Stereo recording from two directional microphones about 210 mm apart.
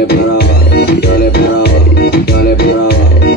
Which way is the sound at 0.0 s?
50° left (ahead or behind).